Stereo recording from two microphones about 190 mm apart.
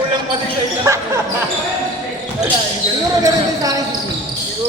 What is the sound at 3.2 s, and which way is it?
Speech, 20° right (ahead or behind).